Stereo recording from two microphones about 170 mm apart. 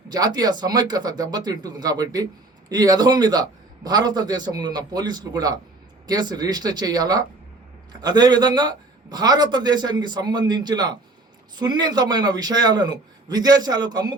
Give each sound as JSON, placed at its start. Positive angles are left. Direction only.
{"t": 0.1, "sound": "a man's voice", "side_deg": -25}